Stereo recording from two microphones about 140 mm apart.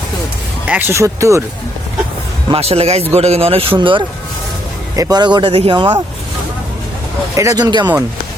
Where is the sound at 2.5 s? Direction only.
45° right (ahead or behind).